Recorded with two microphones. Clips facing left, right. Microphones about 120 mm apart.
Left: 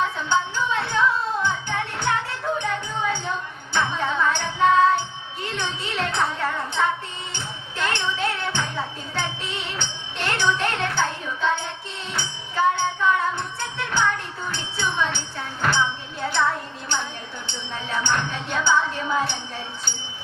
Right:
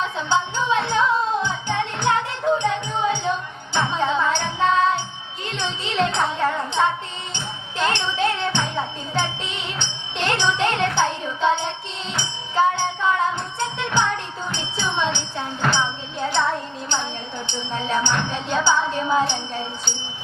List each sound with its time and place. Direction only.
0.2 s music: 20° right (ahead or behind)
16.9 s speech: 20° right (ahead or behind)